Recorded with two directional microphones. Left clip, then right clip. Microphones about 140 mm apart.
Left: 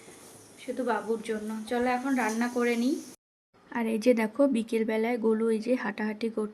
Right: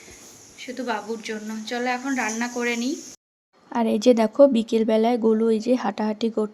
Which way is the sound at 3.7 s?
30° right (ahead or behind).